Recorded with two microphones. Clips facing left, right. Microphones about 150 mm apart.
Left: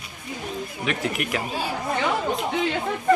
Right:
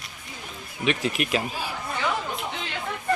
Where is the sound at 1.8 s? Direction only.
50° left (ahead or behind).